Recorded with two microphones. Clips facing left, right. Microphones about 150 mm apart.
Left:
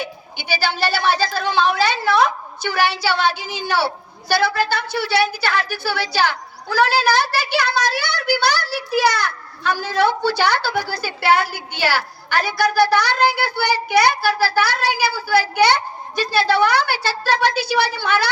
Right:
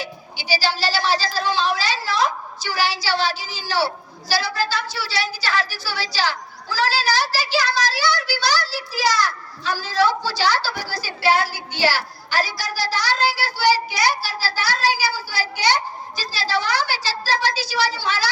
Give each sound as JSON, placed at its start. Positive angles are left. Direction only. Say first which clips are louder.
{"t": 0.0, "sound": "a woman's voice", "louder": "left 3 dB", "side_deg": 55}